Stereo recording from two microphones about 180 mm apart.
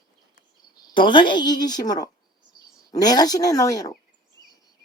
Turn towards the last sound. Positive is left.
turn(degrees=20)  # may be behind; listen again after turning